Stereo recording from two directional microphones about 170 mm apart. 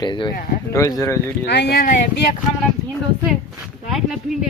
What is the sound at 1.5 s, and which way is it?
Speech, 75° left (ahead or behind).